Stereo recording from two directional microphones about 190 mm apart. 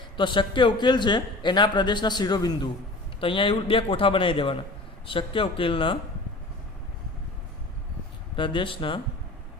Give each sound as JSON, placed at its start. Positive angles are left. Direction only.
{"t": 0.2, "sound": "a man's voice", "side_deg": 25}
{"t": 8.4, "sound": "a man's voice", "side_deg": 25}